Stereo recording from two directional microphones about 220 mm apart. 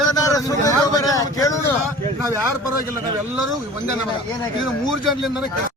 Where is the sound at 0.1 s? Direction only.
15° left (ahead or behind).